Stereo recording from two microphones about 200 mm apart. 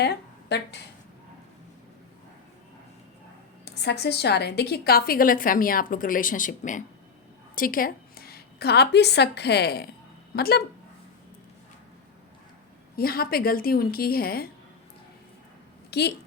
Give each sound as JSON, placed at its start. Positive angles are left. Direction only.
{"t": 0.0, "sound": "speech", "side_deg": 55}
{"t": 3.7, "sound": "a woman's voice", "side_deg": 55}
{"t": 13.0, "sound": "a woman's voice", "side_deg": 50}
{"t": 15.9, "sound": "a woman's voice", "side_deg": 55}